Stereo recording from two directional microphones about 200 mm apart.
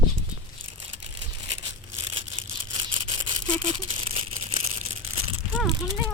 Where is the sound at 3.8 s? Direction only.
25° right (ahead or behind).